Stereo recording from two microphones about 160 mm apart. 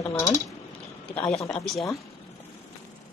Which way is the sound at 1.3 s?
Centre (ahead or behind).